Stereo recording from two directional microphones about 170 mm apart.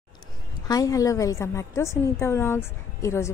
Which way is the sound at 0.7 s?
20° left (ahead or behind).